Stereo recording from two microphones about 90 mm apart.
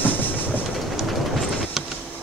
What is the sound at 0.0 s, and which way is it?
Train, 20° left (ahead or behind).